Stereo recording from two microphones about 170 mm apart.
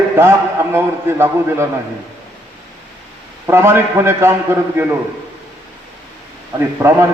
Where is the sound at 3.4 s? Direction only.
15° right (ahead or behind).